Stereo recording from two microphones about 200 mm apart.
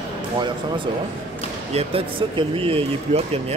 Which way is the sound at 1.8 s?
25° right (ahead or behind).